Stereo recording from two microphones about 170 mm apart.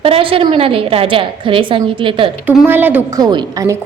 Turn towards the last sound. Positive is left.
turn(degrees=-25)  # may be behind; listen again after turning